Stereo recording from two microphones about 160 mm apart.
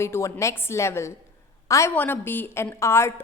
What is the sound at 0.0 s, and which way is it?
A woman's voice, 15° left (ahead or behind).